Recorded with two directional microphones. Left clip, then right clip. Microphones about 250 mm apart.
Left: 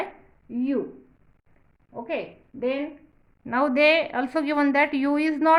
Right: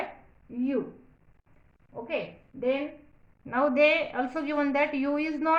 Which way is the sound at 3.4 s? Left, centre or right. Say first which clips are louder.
Left 3 dB; left.